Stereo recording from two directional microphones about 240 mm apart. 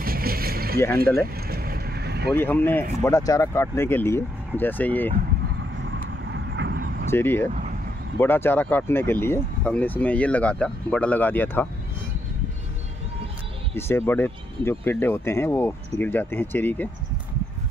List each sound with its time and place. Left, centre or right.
0.0 s vehicle: right
2.3 s speech: centre
6.3 s vehicle: right
7.1 s speech: centre
13.7 s speech: centre